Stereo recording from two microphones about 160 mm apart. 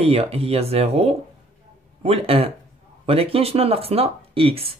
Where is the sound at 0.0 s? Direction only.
40° right (ahead or behind).